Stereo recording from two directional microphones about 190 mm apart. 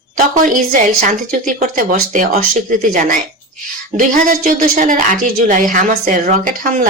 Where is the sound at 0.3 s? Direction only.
45° right (ahead or behind).